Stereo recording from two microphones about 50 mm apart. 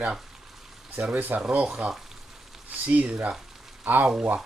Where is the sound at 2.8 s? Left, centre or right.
Right.